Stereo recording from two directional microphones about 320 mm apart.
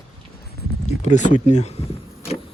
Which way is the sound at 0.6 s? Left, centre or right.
Left.